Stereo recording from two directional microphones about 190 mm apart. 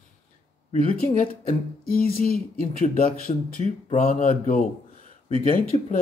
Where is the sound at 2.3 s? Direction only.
45° left (ahead or behind).